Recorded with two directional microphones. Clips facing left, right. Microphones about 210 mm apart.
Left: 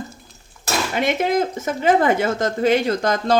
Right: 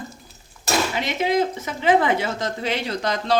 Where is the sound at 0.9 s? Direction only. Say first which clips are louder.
Left 5 dB; 50° left (ahead or behind).